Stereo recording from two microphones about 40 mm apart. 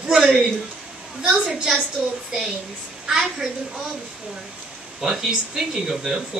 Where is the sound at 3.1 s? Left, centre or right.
Centre.